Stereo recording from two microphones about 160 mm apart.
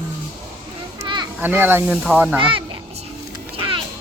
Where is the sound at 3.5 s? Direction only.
30° right (ahead or behind).